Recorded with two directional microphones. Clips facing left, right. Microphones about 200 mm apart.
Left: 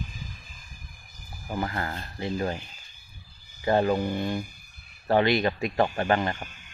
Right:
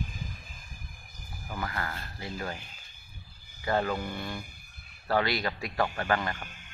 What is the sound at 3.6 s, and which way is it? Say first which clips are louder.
Speech: left 6 dB; 25° left (ahead or behind).